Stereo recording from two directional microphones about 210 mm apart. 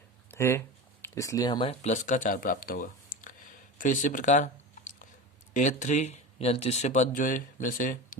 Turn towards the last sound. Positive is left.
turn(degrees=40)  # may be behind; listen again after turning